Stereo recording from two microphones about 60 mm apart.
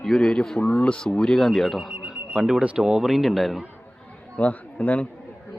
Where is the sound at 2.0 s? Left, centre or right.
Centre.